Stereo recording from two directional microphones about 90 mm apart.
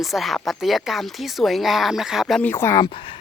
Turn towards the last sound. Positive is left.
turn(degrees=65)  # may be behind; listen again after turning